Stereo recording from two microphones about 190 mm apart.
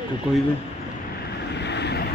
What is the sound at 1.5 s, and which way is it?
Vehicle, 65° left (ahead or behind).